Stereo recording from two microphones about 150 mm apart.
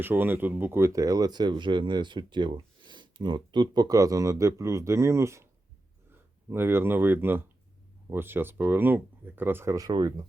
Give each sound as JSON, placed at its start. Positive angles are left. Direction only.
{"t": 0.0, "sound": "speech", "side_deg": -15}
{"t": 6.5, "sound": "speech", "side_deg": -15}